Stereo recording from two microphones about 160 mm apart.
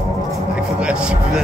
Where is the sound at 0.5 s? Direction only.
5° right (ahead or behind).